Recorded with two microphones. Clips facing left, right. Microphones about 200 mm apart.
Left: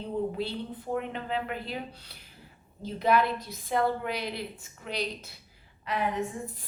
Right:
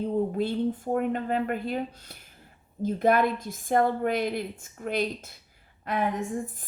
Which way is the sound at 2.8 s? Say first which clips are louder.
Right 3 dB; 50° right (ahead or behind).